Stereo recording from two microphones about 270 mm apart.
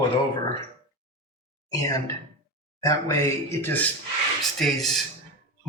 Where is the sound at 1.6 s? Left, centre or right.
Centre.